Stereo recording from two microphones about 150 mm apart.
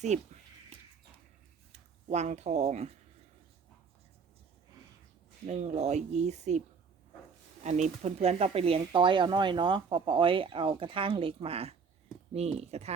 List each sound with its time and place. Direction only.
0.1 s speech: 50° right (ahead or behind)
2.0 s speech: 50° right (ahead or behind)
5.5 s speech: 45° right (ahead or behind)
7.6 s speech: 50° right (ahead or behind)